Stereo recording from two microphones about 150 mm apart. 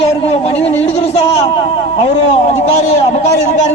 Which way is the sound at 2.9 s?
50° left (ahead or behind).